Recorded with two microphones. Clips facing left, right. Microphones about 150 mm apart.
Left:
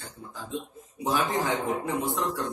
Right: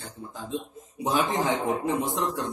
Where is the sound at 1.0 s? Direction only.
20° right (ahead or behind).